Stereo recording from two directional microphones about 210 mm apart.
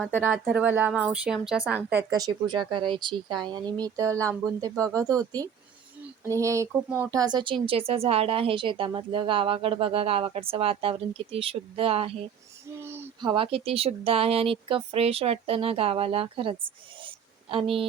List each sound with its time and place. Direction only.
0.1 s speech: 10° right (ahead or behind)
2.0 s speech: 20° right (ahead or behind)
12.8 s a sound: 10° right (ahead or behind)
13.3 s speech: 25° right (ahead or behind)